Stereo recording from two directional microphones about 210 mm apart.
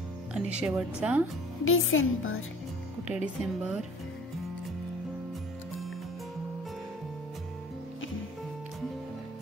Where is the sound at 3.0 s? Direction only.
5° right (ahead or behind).